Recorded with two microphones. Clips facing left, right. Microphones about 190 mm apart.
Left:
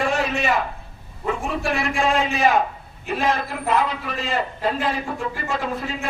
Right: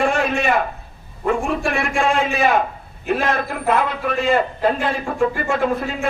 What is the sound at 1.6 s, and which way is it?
A man's voice, 55° right (ahead or behind).